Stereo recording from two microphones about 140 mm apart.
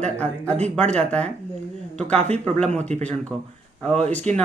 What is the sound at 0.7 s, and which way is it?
Speech, 10° left (ahead or behind).